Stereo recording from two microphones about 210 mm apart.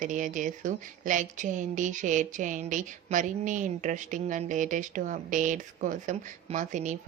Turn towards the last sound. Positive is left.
turn(degrees=-35)  # may be behind; listen again after turning